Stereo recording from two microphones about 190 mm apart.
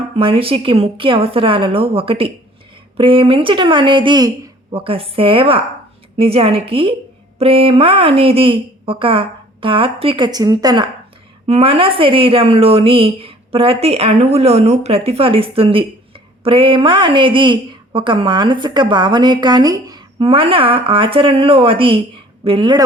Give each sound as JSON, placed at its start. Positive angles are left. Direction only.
{"t": 0.2, "sound": "a woman's voice", "side_deg": -30}
{"t": 11.4, "sound": "a woman's voice", "side_deg": -30}